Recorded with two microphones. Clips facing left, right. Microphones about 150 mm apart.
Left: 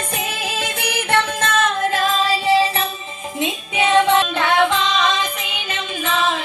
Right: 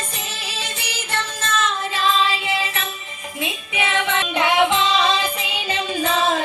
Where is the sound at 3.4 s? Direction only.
20° left (ahead or behind).